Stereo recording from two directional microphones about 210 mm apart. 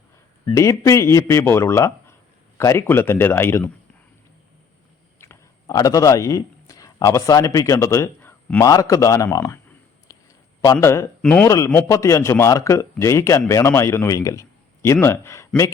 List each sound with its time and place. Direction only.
0.5 s a man's voice: 15° left (ahead or behind)
5.2 s a man's voice: 15° left (ahead or behind)